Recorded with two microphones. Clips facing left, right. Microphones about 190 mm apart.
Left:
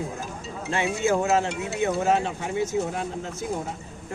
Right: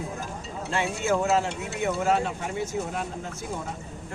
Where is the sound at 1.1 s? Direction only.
20° left (ahead or behind).